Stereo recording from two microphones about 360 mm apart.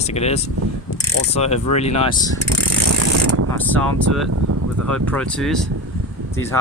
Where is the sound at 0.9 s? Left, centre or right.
Left.